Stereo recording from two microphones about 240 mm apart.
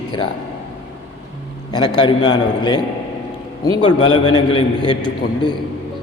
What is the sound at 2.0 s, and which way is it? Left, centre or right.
Speech, centre.